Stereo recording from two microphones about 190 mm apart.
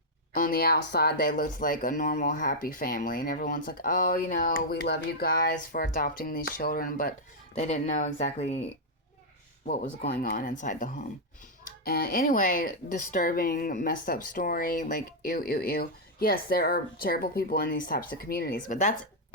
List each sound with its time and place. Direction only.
0.3 s speech: 50° left (ahead or behind)
7.5 s speech: 35° left (ahead or behind)
9.6 s speech: 50° left (ahead or behind)
11.9 s speech: 55° left (ahead or behind)